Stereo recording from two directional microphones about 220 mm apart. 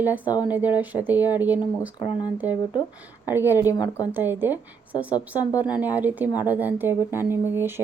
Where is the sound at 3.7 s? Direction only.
20° left (ahead or behind).